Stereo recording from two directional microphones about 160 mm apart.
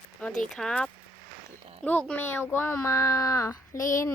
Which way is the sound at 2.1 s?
15° left (ahead or behind).